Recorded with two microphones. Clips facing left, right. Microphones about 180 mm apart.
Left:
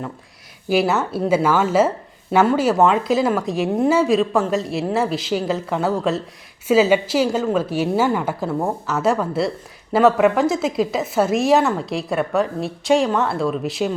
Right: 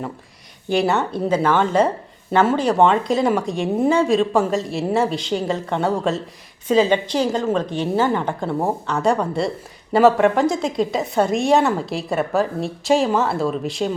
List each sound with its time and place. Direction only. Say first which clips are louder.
0.7 s a woman's voice: left 1 dB; 5° left (ahead or behind)